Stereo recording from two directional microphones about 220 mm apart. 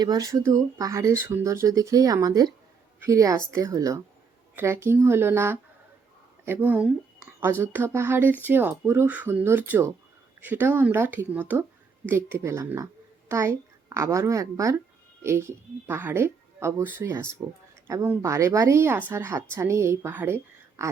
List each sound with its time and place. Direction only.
0.0 s a woman's voice: 15° right (ahead or behind)